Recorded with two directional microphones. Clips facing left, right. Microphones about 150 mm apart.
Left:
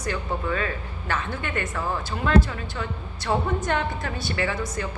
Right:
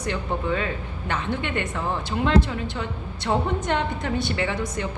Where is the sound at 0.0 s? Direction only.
20° right (ahead or behind).